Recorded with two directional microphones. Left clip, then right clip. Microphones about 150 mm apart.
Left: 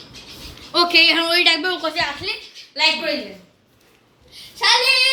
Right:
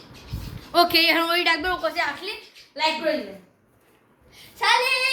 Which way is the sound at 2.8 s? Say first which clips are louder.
Left 6 dB; 30° left (ahead or behind).